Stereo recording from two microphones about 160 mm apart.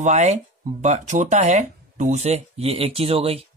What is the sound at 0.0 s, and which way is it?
Speech, 45° right (ahead or behind).